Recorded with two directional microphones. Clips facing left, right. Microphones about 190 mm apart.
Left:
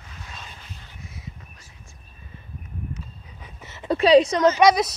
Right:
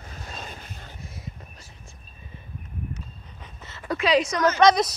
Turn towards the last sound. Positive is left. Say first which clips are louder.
# left 1 dB
turn(degrees=10)  # may be behind; listen again after turning